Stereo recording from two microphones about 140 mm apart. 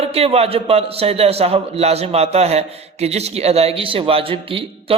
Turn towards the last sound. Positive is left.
turn(degrees=-40)  # may be behind; listen again after turning